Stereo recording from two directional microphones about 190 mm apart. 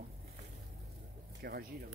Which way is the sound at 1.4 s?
55° right (ahead or behind).